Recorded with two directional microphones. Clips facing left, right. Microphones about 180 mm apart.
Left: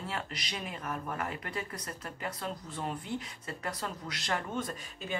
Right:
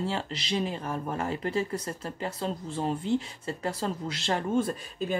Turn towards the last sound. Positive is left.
turn(degrees=-30)  # may be behind; listen again after turning